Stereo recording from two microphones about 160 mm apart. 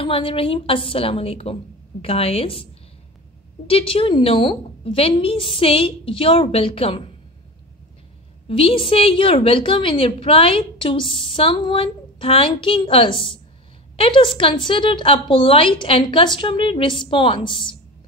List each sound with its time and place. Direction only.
0.0 s a woman's voice: 35° left (ahead or behind)
8.5 s a woman's voice: 35° left (ahead or behind)